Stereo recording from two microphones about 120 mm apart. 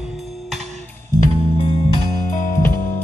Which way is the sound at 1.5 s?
45° left (ahead or behind).